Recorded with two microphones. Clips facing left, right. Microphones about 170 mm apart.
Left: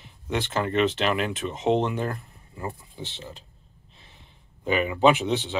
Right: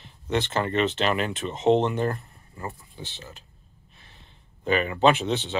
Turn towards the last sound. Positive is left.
turn(degrees=10)  # may be behind; listen again after turning